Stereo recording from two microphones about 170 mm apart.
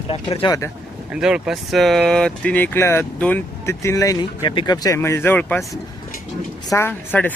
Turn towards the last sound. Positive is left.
turn(degrees=10)  # may be behind; listen again after turning